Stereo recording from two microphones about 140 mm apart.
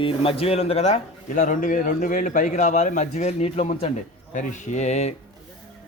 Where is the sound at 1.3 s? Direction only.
75° left (ahead or behind); by 5.1 s 50° left (ahead or behind).